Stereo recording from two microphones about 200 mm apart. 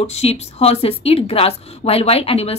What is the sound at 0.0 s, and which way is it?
A woman's voice, 30° left (ahead or behind).